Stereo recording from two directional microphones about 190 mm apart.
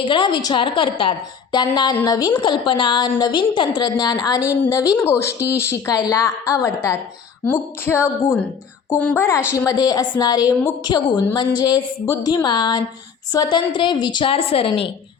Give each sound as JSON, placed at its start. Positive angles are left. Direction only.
{"t": 0.0, "sound": "a woman's voice", "side_deg": 25}